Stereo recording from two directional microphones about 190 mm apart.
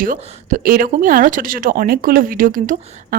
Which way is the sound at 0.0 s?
45° right (ahead or behind).